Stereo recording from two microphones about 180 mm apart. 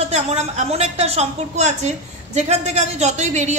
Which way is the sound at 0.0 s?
35° right (ahead or behind).